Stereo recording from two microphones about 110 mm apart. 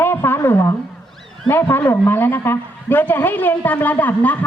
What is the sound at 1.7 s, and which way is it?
A woman's voice, 20° left (ahead or behind).